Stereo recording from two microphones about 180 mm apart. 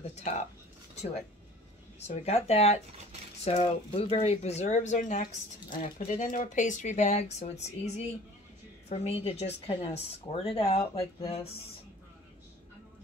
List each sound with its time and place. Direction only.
0.0 s speech: 40° left (ahead or behind)